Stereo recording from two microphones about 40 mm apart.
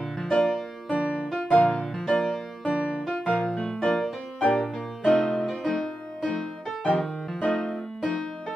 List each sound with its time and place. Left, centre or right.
0.2 s music: centre
1.0 s music: centre
1.7 s music: centre
3.2 s music: left